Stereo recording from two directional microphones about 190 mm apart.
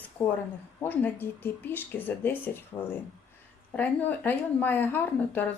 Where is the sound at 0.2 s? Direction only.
10° left (ahead or behind).